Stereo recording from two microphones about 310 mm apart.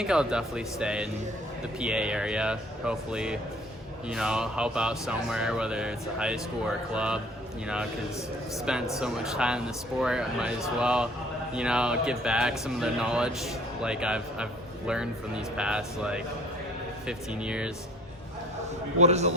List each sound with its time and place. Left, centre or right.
0.0 s speech: centre
8.5 s speech: centre
18.9 s a man's voice: right